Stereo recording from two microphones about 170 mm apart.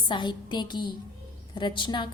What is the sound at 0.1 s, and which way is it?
A woman's voice, 25° left (ahead or behind).